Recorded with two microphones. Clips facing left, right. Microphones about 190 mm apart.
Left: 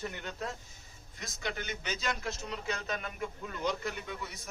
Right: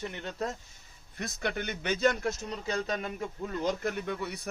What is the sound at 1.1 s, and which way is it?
A man's voice, 60° right (ahead or behind).